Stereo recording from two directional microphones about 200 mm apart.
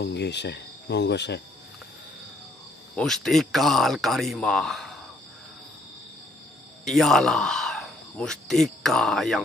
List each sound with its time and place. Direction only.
0.0 s speech: 55° left (ahead or behind)
3.0 s speech: centre (ahead or behind)
6.8 s speech: centre (ahead or behind)